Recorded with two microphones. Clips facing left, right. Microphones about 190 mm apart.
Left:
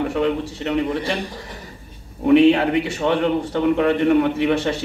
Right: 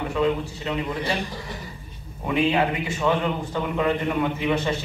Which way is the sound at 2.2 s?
70° left (ahead or behind).